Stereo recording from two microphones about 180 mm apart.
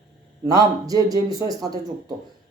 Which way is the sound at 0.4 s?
20° right (ahead or behind).